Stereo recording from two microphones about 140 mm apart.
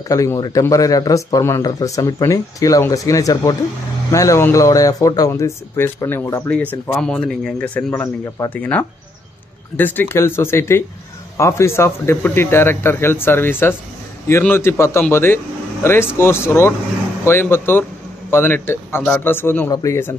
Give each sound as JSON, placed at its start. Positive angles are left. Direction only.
{"t": 0.1, "sound": "a man's voice", "side_deg": 25}